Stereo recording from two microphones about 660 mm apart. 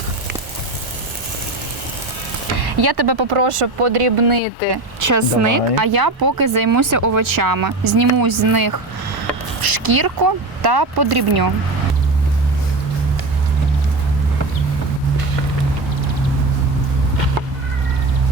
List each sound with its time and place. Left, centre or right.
2.6 s speech: right
4.9 s speech: right